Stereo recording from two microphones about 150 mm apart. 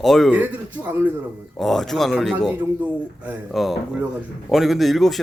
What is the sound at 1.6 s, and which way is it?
Speech, centre (ahead or behind).